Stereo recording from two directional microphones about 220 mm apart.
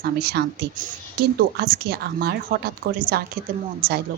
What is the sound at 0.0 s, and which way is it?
A woman's voice, 45° right (ahead or behind).